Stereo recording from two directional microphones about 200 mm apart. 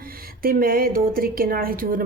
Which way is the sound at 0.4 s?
45° right (ahead or behind).